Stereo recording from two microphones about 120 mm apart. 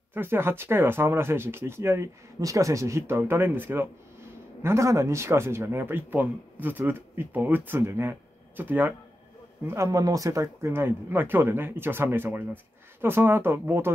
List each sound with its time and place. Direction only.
0.1 s a man's voice: 20° right (ahead or behind)
9.7 s a man's voice: 25° right (ahead or behind)